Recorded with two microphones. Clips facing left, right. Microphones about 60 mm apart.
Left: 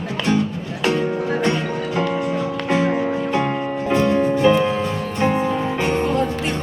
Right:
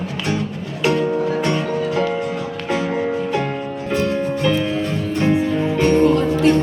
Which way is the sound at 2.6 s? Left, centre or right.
Left.